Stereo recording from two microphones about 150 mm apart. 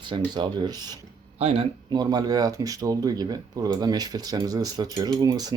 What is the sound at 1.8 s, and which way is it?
Speech, 25° right (ahead or behind).